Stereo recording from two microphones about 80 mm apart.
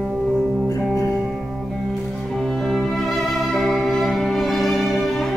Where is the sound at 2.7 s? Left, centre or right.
Centre.